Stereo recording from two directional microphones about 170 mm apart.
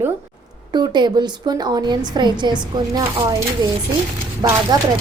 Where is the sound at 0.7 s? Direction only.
25° right (ahead or behind).